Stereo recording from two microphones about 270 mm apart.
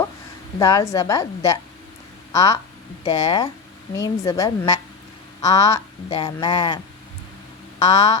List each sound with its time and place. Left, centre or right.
0.6 s speech: centre
7.8 s speech: centre